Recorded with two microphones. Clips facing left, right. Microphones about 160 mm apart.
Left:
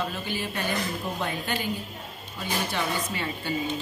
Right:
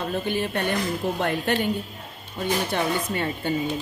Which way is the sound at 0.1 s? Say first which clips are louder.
Right 7 dB; 55° right (ahead or behind).